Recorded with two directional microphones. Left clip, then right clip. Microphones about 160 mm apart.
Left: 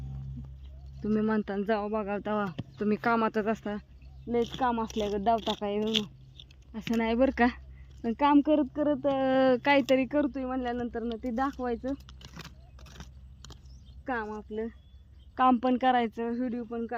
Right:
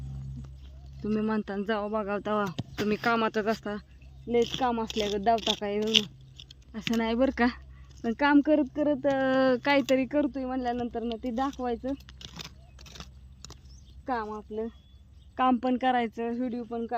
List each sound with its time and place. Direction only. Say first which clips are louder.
1.0 s speech: left 1 dB; centre (ahead or behind)
5.8 s chewing: right 5 dB; 10° right (ahead or behind)
6.9 s speech: left 1 dB; 5° left (ahead or behind)
12.2 s keys jangling: right 5 dB; 5° left (ahead or behind)
12.8 s biting: right 5 dB; centre (ahead or behind)
14.0 s speech: right 2 dB; 15° left (ahead or behind)